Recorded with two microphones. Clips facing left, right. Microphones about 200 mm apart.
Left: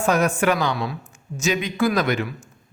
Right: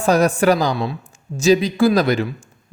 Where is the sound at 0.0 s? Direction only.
35° right (ahead or behind).